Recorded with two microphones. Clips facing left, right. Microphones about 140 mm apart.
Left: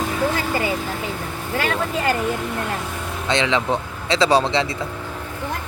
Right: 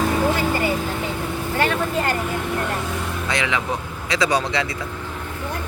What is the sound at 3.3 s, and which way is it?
Speech, 25° left (ahead or behind).